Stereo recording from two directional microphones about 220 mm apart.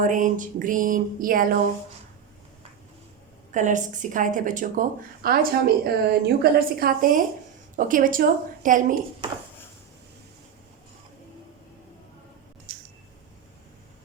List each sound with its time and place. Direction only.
0.0 s a woman's voice: 35° right (ahead or behind)
3.5 s a woman's voice: 35° right (ahead or behind)